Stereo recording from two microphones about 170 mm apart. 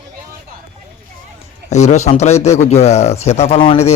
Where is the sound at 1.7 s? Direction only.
40° left (ahead or behind).